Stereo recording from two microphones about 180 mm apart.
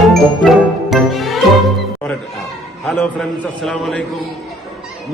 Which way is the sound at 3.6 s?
Centre (ahead or behind).